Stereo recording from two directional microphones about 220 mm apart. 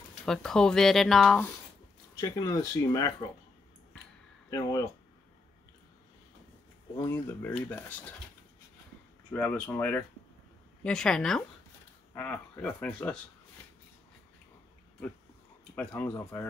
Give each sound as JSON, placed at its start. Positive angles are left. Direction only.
{"t": 0.2, "sound": "speech", "side_deg": 5}
{"t": 2.1, "sound": "speech", "side_deg": 15}
{"t": 4.5, "sound": "speech", "side_deg": 15}
{"t": 7.1, "sound": "speech", "side_deg": 10}
{"t": 9.3, "sound": "speech", "side_deg": 10}
{"t": 15.7, "sound": "speech", "side_deg": 5}